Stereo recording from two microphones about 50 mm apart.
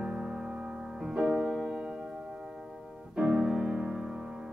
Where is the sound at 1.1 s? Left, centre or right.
Right.